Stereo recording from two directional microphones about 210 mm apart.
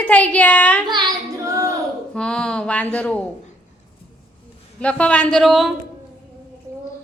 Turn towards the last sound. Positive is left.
turn(degrees=0)  # may be behind; listen again after turning